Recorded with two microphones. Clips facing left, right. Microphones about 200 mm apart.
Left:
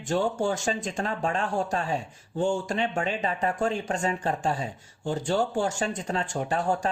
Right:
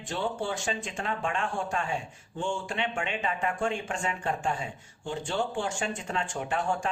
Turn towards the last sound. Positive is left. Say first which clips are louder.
# left 3 dB
turn(degrees=35)  # may be behind; listen again after turning